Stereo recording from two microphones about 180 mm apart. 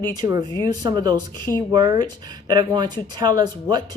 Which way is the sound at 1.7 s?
25° right (ahead or behind).